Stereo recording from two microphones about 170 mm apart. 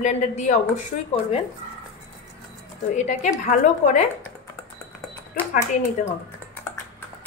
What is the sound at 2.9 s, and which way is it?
A woman's voice, 45° left (ahead or behind).